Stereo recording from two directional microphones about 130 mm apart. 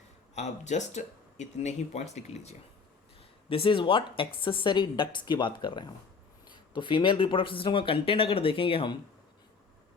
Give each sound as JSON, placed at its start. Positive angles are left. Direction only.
{"t": 0.3, "sound": "speech", "side_deg": 65}
{"t": 3.5, "sound": "speech", "side_deg": 40}